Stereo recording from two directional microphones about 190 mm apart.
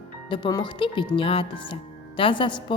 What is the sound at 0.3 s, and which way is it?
Speech, 25° left (ahead or behind).